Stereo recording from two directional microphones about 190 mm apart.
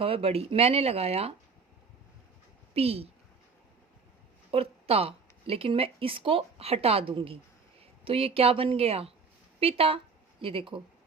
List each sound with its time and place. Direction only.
0.0 s speech: 30° right (ahead or behind)
2.7 s speech: 30° right (ahead or behind)
4.5 s speech: 30° right (ahead or behind)